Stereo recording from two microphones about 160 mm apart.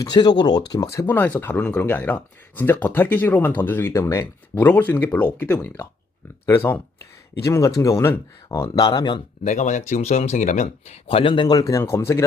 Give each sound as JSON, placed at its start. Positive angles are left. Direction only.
{"t": 0.0, "sound": "speech", "side_deg": 25}
{"t": 1.0, "sound": "speech", "side_deg": 10}
{"t": 9.4, "sound": "speech", "side_deg": 50}